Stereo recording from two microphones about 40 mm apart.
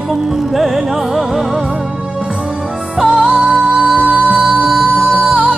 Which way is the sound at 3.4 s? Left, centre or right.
Right.